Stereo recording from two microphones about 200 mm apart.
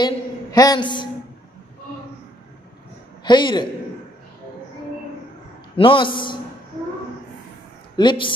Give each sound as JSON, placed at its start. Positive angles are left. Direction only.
{"t": 0.0, "sound": "a sound", "side_deg": 20}
{"t": 3.3, "sound": "a man's voice", "side_deg": 20}
{"t": 5.8, "sound": "a man's voice", "side_deg": 25}
{"t": 7.9, "sound": "speech", "side_deg": 25}